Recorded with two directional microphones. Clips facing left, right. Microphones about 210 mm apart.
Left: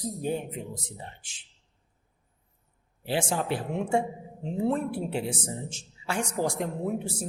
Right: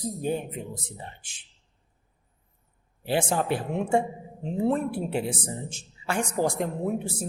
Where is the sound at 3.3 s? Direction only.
55° right (ahead or behind).